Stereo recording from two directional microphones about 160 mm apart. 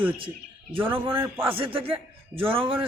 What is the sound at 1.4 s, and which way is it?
A man's voice, 35° right (ahead or behind).